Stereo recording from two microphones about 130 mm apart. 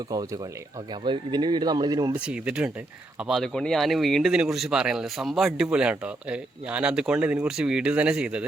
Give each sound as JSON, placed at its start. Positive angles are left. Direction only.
{"t": 1.0, "sound": "speech", "side_deg": -35}
{"t": 2.2, "sound": "speech", "side_deg": -10}